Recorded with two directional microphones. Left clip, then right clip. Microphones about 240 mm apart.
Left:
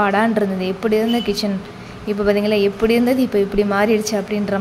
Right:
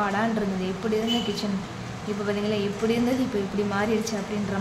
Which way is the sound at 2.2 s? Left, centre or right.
Left.